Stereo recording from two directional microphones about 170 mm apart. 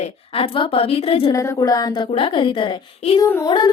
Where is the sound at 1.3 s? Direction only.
20° left (ahead or behind).